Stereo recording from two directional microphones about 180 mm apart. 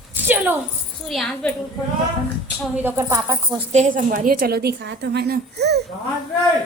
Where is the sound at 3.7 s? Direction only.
45° right (ahead or behind); by 5.8 s 65° right (ahead or behind).